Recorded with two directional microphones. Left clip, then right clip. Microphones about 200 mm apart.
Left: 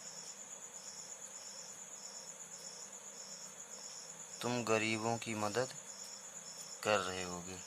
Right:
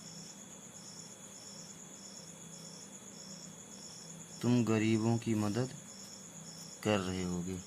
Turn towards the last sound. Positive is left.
turn(degrees=25)  # may be behind; listen again after turning